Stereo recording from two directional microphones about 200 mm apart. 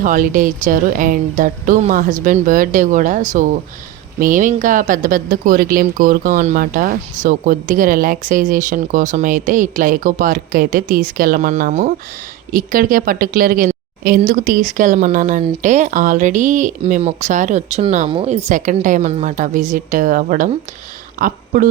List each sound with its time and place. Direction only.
0.0 s a woman's voice: 40° right (ahead or behind)